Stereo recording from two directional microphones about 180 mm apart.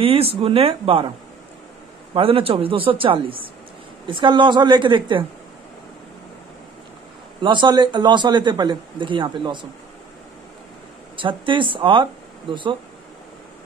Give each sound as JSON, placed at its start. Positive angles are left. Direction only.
{"t": 0.0, "sound": "speech", "side_deg": -35}
{"t": 2.1, "sound": "speech", "side_deg": -30}
{"t": 7.4, "sound": "speech", "side_deg": -25}
{"t": 11.1, "sound": "speech", "side_deg": -30}